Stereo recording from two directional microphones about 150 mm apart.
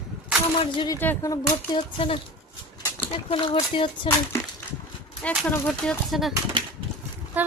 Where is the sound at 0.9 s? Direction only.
20° left (ahead or behind).